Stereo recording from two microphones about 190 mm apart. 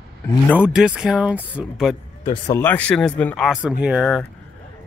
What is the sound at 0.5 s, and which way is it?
Speech, 5° right (ahead or behind).